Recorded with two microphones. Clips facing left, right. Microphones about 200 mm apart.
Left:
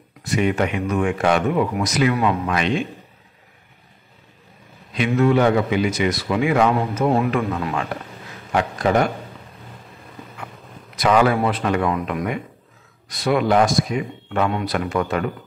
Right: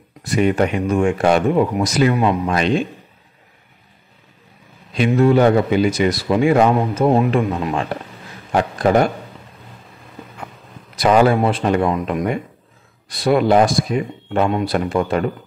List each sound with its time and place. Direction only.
0.2 s speech: 35° right (ahead or behind)
4.9 s a man's voice: 35° right (ahead or behind)
11.0 s speech: 30° right (ahead or behind)